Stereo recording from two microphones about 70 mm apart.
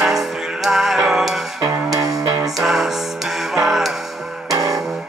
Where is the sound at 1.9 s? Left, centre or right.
Right.